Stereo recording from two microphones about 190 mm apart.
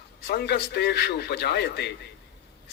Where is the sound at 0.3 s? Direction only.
60° left (ahead or behind).